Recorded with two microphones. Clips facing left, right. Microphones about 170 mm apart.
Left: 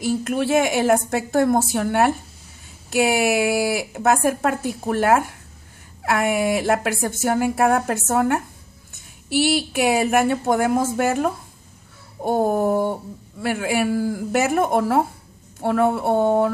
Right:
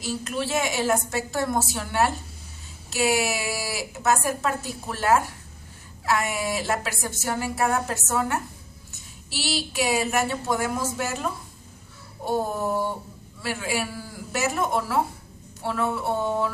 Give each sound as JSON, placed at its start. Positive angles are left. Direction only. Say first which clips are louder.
{"t": 0.0, "sound": "speech", "louder": "left 7 dB", "side_deg": 55}